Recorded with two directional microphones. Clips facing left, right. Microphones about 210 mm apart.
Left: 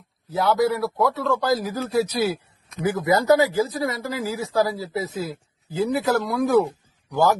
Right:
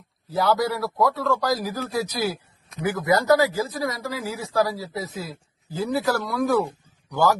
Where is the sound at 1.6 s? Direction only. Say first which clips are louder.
Left 4 dB; 25° left (ahead or behind).